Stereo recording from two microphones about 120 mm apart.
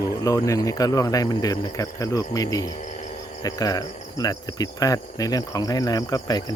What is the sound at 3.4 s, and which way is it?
Cricket, 30° left (ahead or behind).